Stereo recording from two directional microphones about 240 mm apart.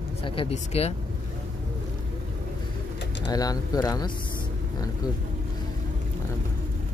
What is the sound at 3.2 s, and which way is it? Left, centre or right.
Speech, centre.